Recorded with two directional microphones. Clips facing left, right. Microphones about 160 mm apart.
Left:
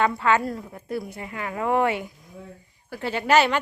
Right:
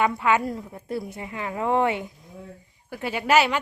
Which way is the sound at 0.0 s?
15° right (ahead or behind).